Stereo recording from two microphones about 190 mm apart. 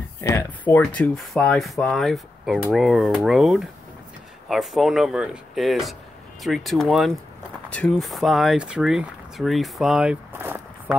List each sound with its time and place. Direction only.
0.2 s speech: 15° left (ahead or behind); by 10.6 s 10° right (ahead or behind)